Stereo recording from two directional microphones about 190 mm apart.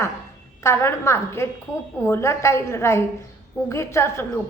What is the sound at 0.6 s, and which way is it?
A woman's voice, 15° left (ahead or behind).